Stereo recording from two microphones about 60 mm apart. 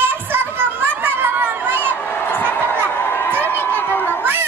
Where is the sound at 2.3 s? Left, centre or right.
Left.